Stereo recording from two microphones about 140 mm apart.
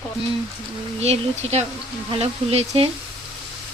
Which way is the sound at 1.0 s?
50° right (ahead or behind).